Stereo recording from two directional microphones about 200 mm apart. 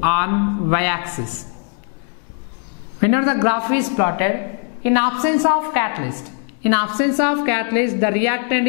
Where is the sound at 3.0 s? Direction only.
5° left (ahead or behind).